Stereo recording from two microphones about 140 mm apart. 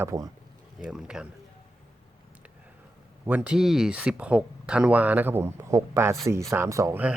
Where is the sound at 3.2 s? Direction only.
10° right (ahead or behind).